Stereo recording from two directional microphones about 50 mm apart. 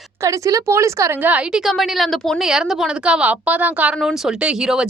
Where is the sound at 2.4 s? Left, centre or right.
Centre.